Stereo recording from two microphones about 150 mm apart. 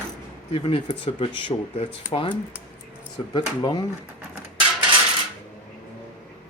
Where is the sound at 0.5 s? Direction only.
40° left (ahead or behind).